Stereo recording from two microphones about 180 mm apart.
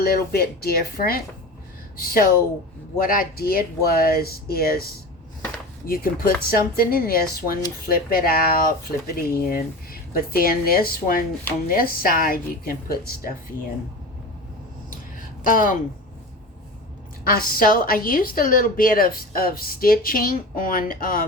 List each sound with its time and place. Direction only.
0.0 s speech: 55° left (ahead or behind)
3.0 s a woman's voice: 55° left (ahead or behind)
15.4 s a woman's voice: 50° left (ahead or behind)
17.2 s a woman's voice: 55° left (ahead or behind)